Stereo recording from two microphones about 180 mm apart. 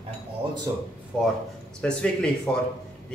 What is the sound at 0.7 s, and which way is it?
Speech, 20° right (ahead or behind).